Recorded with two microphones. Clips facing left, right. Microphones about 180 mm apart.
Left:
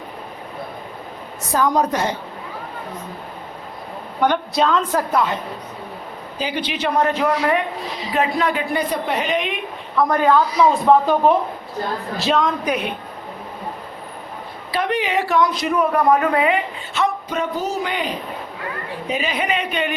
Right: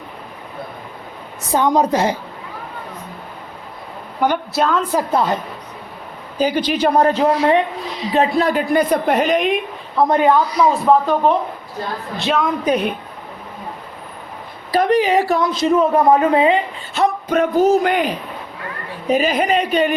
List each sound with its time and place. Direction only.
1.5 s speech: 25° right (ahead or behind)
4.2 s a woman's voice: 5° right (ahead or behind)
5.1 s a woman's voice: 40° right (ahead or behind)
6.4 s a woman's voice: 40° right (ahead or behind)
10.0 s speech: 20° right (ahead or behind)
10.6 s speech: centre (ahead or behind)
12.6 s a woman's voice: 35° right (ahead or behind)
14.7 s a woman's voice: 40° right (ahead or behind)
15.5 s speech: 25° right (ahead or behind)
17.3 s a woman's voice: 55° right (ahead or behind); by 19.9 s 40° right (ahead or behind)